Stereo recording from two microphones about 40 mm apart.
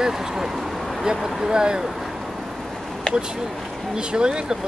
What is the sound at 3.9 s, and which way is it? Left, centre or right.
Speech, centre.